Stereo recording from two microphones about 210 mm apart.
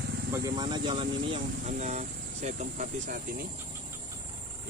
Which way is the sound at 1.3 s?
35° right (ahead or behind).